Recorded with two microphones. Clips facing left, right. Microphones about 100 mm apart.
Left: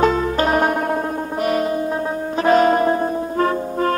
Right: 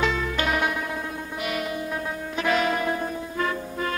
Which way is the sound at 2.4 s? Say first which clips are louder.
Left 9 dB; 40° left (ahead or behind).